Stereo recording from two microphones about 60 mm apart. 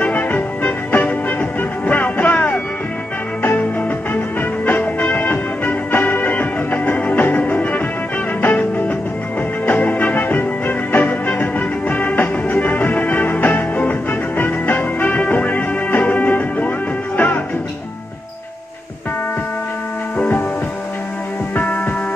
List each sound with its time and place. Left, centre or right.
0.0 s music: left
4.1 s music: left